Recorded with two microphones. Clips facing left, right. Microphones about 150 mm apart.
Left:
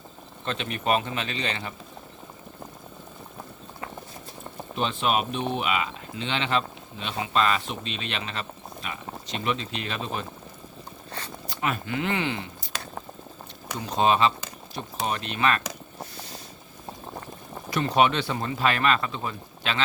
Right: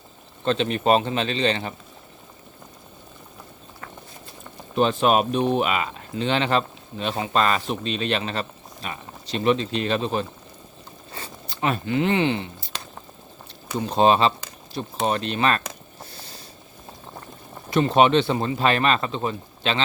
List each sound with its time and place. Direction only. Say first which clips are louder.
0.4 s speech: right 7 dB; 30° right (ahead or behind)
4.7 s speech: right 7 dB; 45° right (ahead or behind)
11.4 s speech: right 5 dB; 30° right (ahead or behind)
13.7 s speech: right 4 dB; 30° right (ahead or behind)
16.1 s boat: left 2 dB; 30° right (ahead or behind)
17.7 s speech: right 5 dB; 25° right (ahead or behind)